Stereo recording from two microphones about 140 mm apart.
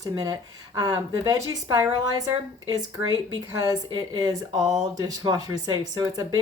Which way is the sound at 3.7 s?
30° right (ahead or behind).